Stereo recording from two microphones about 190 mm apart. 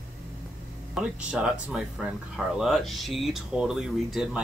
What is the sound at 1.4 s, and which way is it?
Speech, 5° right (ahead or behind).